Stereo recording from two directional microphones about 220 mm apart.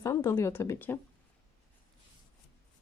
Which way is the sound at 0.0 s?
15° left (ahead or behind).